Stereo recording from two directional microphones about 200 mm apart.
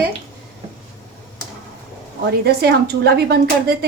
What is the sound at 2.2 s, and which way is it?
Speech, 55° right (ahead or behind).